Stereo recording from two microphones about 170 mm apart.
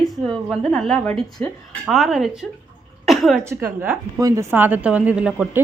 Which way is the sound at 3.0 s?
Centre (ahead or behind).